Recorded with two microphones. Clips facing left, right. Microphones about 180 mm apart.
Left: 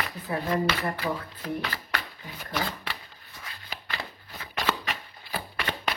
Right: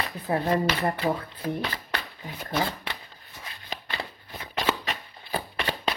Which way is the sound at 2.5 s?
20° right (ahead or behind).